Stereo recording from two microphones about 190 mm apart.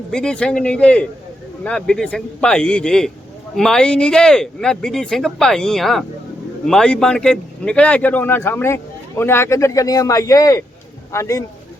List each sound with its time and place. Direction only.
0.1 s a man's voice: 5° left (ahead or behind)